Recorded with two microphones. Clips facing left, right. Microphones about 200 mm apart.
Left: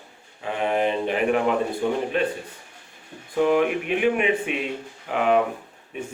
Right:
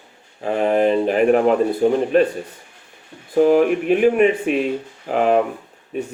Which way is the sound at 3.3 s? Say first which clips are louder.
Right 6 dB; 40° right (ahead or behind).